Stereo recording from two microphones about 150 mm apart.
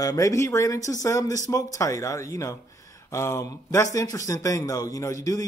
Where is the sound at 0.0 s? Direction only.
20° left (ahead or behind).